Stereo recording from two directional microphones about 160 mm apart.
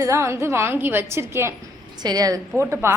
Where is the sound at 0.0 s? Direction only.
20° right (ahead or behind).